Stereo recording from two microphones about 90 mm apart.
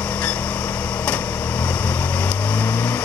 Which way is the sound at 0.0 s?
15° left (ahead or behind).